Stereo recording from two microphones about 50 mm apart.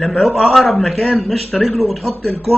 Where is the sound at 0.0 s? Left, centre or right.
Centre.